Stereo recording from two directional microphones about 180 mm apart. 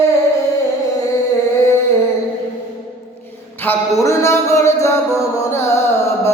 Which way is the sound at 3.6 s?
15° left (ahead or behind).